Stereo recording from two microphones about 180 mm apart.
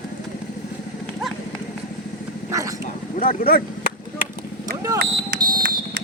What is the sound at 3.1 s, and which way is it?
Speech, 55° left (ahead or behind).